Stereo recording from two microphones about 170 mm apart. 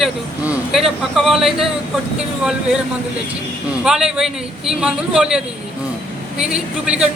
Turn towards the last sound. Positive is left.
turn(degrees=-5)  # may be behind; listen again after turning